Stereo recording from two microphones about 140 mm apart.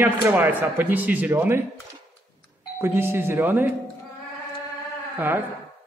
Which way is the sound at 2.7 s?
15° right (ahead or behind).